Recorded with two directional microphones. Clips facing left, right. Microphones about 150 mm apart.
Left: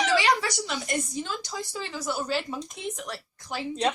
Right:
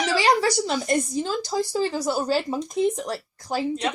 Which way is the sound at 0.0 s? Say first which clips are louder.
Right 3 dB; 35° right (ahead or behind).